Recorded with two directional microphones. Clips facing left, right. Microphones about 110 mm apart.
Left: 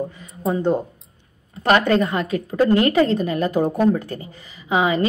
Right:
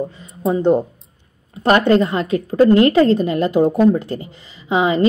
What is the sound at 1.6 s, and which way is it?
A woman's voice, 25° right (ahead or behind).